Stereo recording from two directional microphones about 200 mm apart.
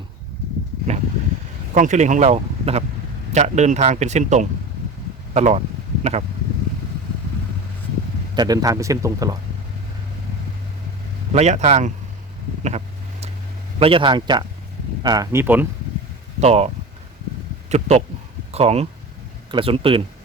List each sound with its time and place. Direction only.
1.7 s speech: 40° right (ahead or behind)
5.3 s a sound: 35° right (ahead or behind)
8.4 s speech: 20° right (ahead or behind)
11.3 s speech: 35° right (ahead or behind)
12.6 s vehicle: 30° right (ahead or behind)
13.7 s a man's voice: 25° right (ahead or behind); by 15.6 s 10° right (ahead or behind)
16.4 s speech: 30° right (ahead or behind)
17.7 s a man's voice: 30° right (ahead or behind)